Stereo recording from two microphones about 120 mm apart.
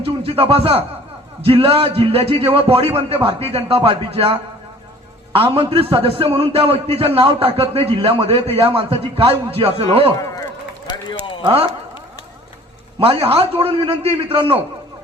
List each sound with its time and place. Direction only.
0.0 s a man's voice: 50° right (ahead or behind)
10.8 s run: 40° left (ahead or behind)
13.0 s a man's voice: 50° right (ahead or behind)